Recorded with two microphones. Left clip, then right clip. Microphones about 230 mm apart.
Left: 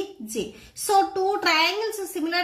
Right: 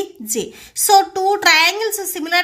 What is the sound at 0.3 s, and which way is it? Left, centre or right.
A woman's voice, right.